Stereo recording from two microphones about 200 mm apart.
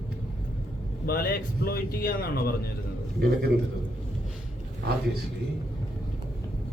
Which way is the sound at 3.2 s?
55° right (ahead or behind).